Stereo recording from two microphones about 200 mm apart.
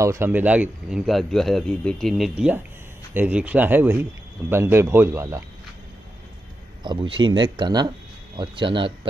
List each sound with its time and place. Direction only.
0.0 s speech: 15° right (ahead or behind)
6.8 s speech: 25° right (ahead or behind)